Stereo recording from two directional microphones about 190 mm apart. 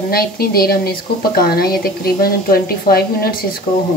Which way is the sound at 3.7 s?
25° left (ahead or behind).